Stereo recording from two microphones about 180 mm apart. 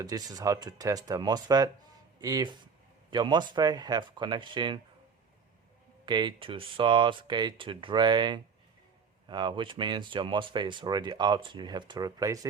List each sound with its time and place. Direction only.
0.0 s speech: 20° right (ahead or behind)
6.1 s speech: 25° right (ahead or behind)